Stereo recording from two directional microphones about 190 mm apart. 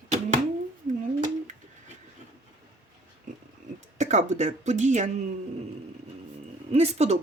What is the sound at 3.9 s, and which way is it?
Speech, 40° right (ahead or behind).